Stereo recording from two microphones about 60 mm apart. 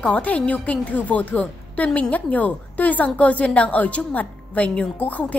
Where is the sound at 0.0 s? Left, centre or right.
Left.